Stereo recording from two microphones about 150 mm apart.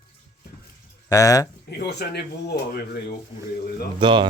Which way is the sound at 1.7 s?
90° left.